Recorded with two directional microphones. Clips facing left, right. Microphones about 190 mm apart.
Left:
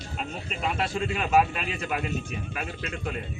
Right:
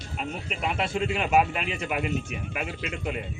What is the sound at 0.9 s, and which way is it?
A man's voice, 20° right (ahead or behind).